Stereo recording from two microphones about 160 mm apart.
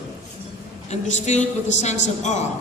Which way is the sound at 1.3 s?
45° left (ahead or behind).